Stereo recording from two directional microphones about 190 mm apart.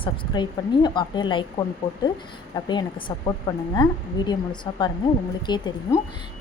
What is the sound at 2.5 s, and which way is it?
Speech, 25° left (ahead or behind).